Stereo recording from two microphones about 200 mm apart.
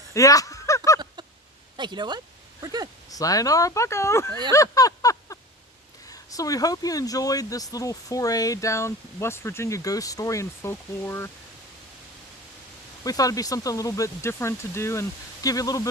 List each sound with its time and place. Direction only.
0.1 s a sound: 15° left (ahead or behind)
1.7 s speech: 20° right (ahead or behind)
3.1 s speech: 15° left (ahead or behind)
4.5 s a sound: 15° left (ahead or behind)
6.1 s speech: 15° left (ahead or behind)
13.1 s speech: 15° left (ahead or behind)